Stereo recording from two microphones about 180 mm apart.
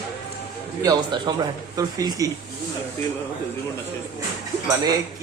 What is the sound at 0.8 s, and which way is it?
Speech, 25° right (ahead or behind).